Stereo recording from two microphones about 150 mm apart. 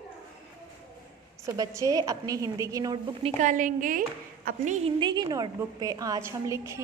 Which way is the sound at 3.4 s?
60° right (ahead or behind).